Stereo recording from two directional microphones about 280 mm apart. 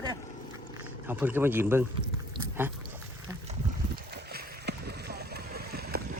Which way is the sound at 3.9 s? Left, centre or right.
Right.